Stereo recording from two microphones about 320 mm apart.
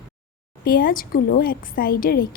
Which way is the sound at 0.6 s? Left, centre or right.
Left.